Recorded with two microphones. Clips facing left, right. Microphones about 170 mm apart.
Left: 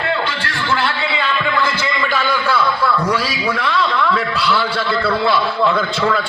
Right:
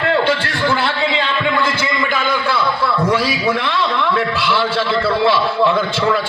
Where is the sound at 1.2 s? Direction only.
20° right (ahead or behind).